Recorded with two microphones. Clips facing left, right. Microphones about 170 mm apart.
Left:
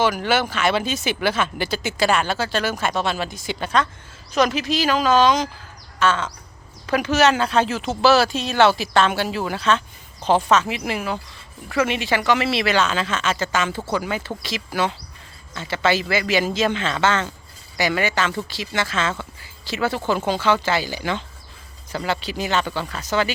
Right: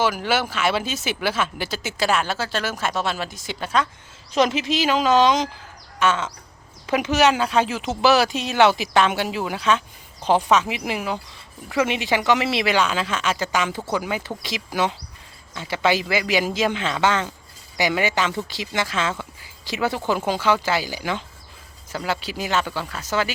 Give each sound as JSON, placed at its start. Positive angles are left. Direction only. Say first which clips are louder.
{"t": 0.0, "sound": "speech", "louder": "left 2 dB", "side_deg": -5}
{"t": 4.3, "sound": "speech", "louder": "even", "side_deg": -25}